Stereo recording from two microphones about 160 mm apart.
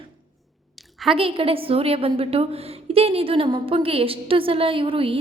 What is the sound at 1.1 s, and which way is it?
A woman's voice, 35° right (ahead or behind).